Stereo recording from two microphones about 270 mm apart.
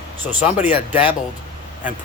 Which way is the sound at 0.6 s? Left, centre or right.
Centre.